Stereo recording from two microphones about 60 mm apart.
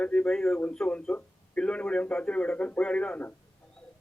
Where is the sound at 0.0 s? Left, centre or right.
Left.